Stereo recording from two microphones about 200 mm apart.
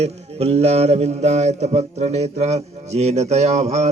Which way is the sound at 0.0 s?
30° right (ahead or behind).